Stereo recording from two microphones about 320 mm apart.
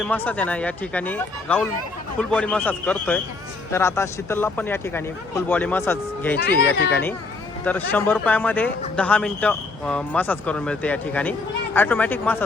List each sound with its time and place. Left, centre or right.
0.0 s a man's voice: centre
6.3 s speech: left
7.6 s speech: centre